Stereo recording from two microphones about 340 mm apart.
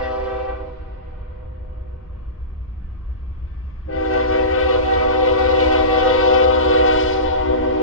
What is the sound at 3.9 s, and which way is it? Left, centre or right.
Train, left.